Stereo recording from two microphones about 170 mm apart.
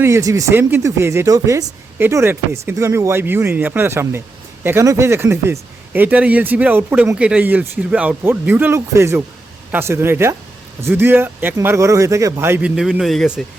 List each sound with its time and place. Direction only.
0.0 s speech: 20° right (ahead or behind); by 13.4 s centre (ahead or behind)